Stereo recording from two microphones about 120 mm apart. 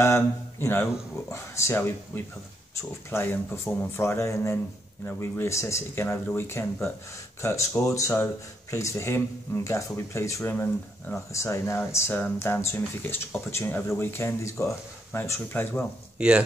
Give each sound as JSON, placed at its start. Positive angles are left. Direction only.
{"t": 0.0, "sound": "speech", "side_deg": 20}
{"t": 16.2, "sound": "speech", "side_deg": -10}